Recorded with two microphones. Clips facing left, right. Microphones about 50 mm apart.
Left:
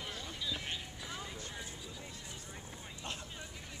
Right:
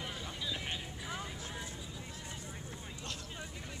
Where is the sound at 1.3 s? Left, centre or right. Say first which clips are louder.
Right 1 dB; centre.